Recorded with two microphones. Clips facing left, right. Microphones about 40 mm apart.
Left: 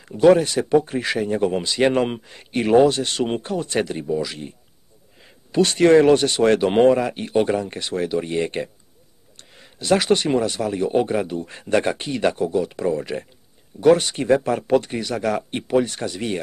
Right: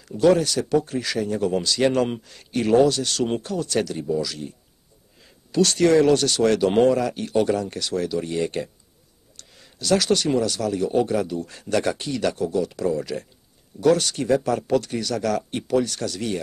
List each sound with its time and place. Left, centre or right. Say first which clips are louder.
0.0 s speech: left 4 dB; left